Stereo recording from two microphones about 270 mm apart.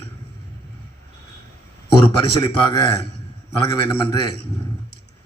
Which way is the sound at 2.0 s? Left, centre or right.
Centre.